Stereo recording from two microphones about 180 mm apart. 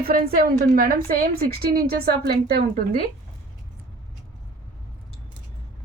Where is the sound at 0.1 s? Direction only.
50° right (ahead or behind).